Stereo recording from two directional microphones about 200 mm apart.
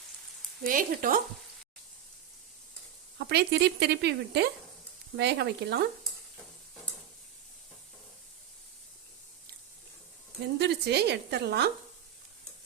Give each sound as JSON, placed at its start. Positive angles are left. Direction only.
{"t": 0.6, "sound": "speech", "side_deg": -45}
{"t": 3.2, "sound": "speech", "side_deg": -55}
{"t": 10.6, "sound": "speech", "side_deg": -55}